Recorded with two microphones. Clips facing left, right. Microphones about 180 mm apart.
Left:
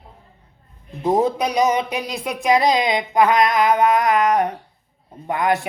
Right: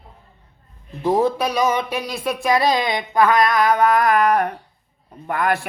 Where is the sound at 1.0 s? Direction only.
20° left (ahead or behind).